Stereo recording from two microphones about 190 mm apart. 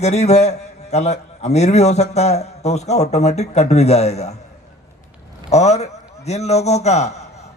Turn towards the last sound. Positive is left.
turn(degrees=35)  # may be behind; listen again after turning